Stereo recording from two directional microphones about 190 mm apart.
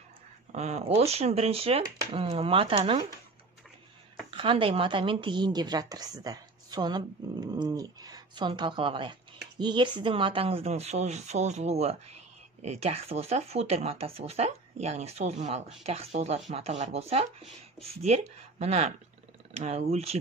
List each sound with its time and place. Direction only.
0.5 s speech: 35° right (ahead or behind)
4.3 s a woman's voice: 30° right (ahead or behind)